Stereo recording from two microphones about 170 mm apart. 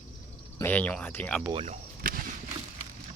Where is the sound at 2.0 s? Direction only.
55° right (ahead or behind).